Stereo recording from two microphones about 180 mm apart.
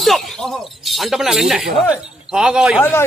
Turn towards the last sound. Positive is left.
turn(degrees=10)  # may be behind; listen again after turning